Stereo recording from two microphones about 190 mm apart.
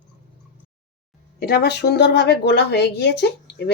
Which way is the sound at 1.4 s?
55° left (ahead or behind).